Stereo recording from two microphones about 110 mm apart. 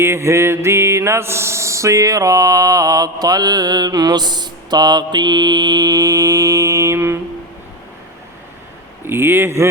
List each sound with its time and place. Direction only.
0.0 s mantra: 25° right (ahead or behind)
9.0 s speech: 20° right (ahead or behind)